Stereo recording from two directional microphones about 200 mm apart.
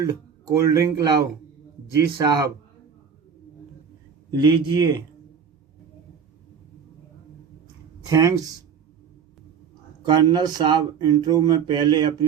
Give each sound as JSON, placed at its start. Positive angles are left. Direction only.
{"t": 0.0, "sound": "speech", "side_deg": -15}
{"t": 4.3, "sound": "speech", "side_deg": -20}
{"t": 8.0, "sound": "speech", "side_deg": -15}
{"t": 10.1, "sound": "speech", "side_deg": -20}